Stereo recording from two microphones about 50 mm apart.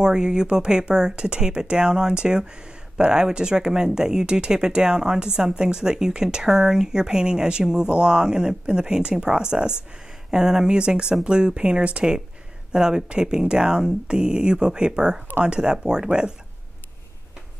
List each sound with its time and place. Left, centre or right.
0.0 s speech: centre